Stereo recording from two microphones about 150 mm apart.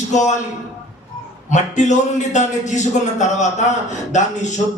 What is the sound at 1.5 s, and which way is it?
A man's voice, 55° left (ahead or behind).